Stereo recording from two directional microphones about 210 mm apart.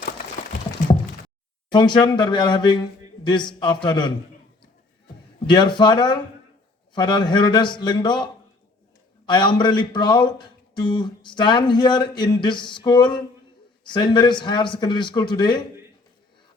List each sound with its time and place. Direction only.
1.7 s speech: 20° left (ahead or behind)
5.5 s speech: 20° left (ahead or behind)